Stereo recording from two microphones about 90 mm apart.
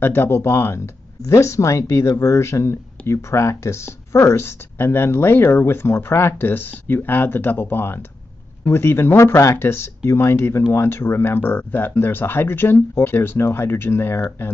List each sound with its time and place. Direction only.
0.0 s speech: 25° left (ahead or behind)